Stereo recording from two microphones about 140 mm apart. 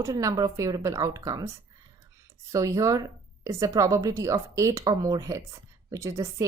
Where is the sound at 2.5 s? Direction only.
25° right (ahead or behind).